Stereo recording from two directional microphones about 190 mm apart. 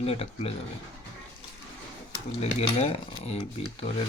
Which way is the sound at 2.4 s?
35° left (ahead or behind).